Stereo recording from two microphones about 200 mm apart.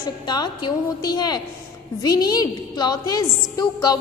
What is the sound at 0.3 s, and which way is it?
A woman's voice, 20° left (ahead or behind).